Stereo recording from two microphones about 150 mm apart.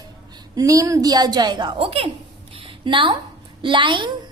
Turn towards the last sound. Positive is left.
turn(degrees=-30)  # may be behind; listen again after turning